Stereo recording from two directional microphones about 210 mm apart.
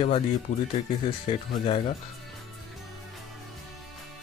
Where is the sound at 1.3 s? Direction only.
30° left (ahead or behind).